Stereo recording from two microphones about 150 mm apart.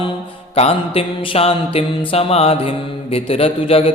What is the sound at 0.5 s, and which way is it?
Mantra, 40° left (ahead or behind).